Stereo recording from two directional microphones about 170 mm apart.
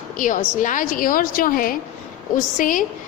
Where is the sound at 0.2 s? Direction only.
50° left (ahead or behind).